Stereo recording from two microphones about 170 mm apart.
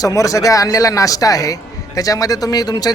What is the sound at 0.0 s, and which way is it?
Speech, 20° left (ahead or behind).